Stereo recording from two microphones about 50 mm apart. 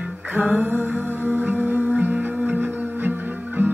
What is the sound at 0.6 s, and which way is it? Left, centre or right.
Music, right.